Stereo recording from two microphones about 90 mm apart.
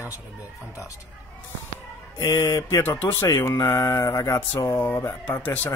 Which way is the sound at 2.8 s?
25° left (ahead or behind).